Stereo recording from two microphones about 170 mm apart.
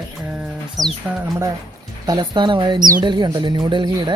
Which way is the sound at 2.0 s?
25° right (ahead or behind).